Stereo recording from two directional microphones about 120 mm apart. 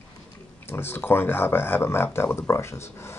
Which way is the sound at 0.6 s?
20° left (ahead or behind).